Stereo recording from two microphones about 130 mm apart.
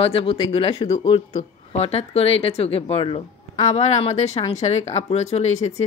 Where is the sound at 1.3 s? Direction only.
55° left (ahead or behind).